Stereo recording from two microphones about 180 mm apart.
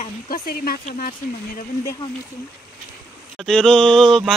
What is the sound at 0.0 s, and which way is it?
Speech, 55° left (ahead or behind).